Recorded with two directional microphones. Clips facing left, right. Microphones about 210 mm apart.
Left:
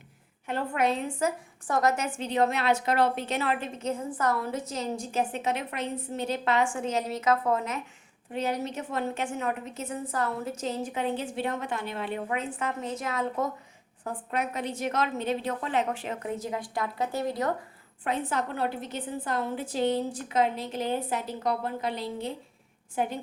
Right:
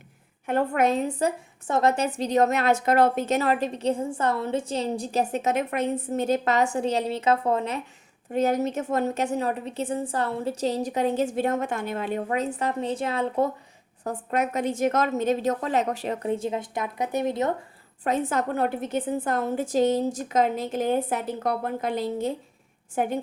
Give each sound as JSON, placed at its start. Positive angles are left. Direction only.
{"t": 0.4, "sound": "a woman's voice", "side_deg": -50}
{"t": 1.6, "sound": "a woman's voice", "side_deg": -25}
{"t": 8.3, "sound": "a woman's voice", "side_deg": -45}
{"t": 14.0, "sound": "a woman's voice", "side_deg": -45}
{"t": 18.0, "sound": "a woman's voice", "side_deg": -45}